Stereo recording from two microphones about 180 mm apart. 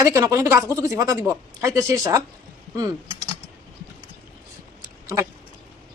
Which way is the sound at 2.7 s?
20° right (ahead or behind).